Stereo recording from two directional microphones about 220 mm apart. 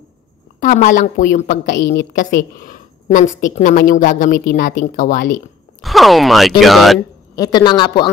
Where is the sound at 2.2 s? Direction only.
35° left (ahead or behind).